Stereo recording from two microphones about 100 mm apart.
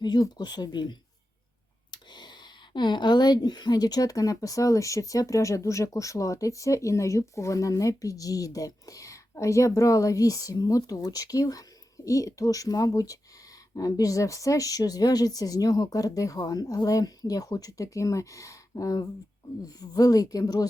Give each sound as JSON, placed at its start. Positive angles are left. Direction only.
{"t": 0.0, "sound": "speech", "side_deg": 45}